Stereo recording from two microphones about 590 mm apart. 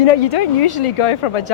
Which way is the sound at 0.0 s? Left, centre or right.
Left.